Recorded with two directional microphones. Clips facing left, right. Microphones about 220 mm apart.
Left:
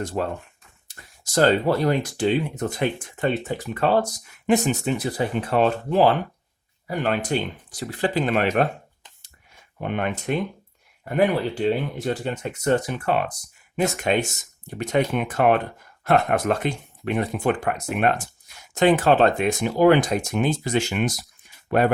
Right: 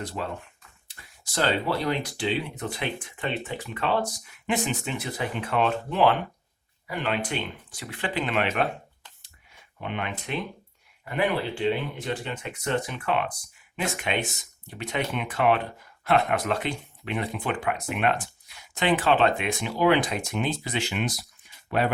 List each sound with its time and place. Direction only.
0.0 s speech: 45° left (ahead or behind)
9.7 s speech: 45° left (ahead or behind)